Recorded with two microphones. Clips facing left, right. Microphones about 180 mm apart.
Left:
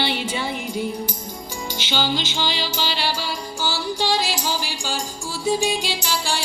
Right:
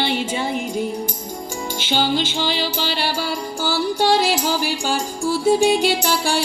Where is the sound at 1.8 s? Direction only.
50° right (ahead or behind).